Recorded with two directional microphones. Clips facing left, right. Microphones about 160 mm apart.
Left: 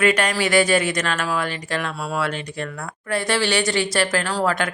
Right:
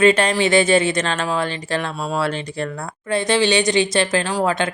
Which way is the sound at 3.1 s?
20° right (ahead or behind).